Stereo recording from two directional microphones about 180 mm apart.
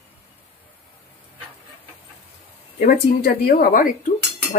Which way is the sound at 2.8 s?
55° left (ahead or behind).